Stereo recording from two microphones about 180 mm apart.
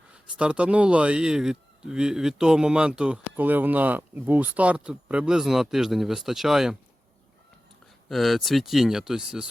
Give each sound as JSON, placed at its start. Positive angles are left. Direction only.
{"t": 0.1, "sound": "speech", "side_deg": -5}
{"t": 8.1, "sound": "speech", "side_deg": 0}